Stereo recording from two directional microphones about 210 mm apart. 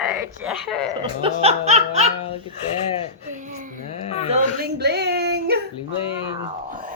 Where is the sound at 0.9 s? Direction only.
25° right (ahead or behind).